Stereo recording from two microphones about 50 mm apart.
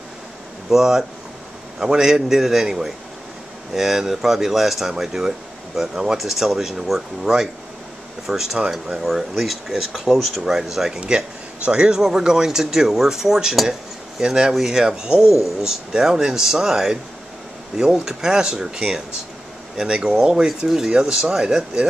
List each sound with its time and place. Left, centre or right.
0.7 s speech: centre